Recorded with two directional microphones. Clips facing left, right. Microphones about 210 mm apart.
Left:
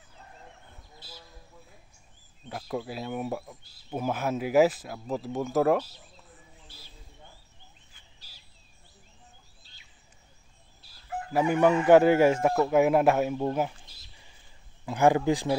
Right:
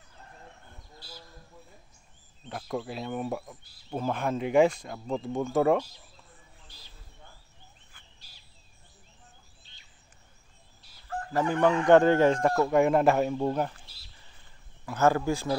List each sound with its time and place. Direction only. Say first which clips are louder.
2.4 s speech: even; 5° left (ahead or behind)
11.1 s chicken: left 2 dB; 10° left (ahead or behind)
14.9 s chicken: left 2 dB; 15° left (ahead or behind)